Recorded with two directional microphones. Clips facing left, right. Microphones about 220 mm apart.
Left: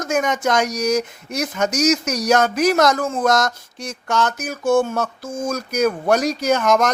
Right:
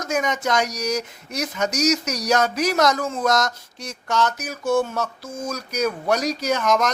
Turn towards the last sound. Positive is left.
turn(degrees=50)  # may be behind; listen again after turning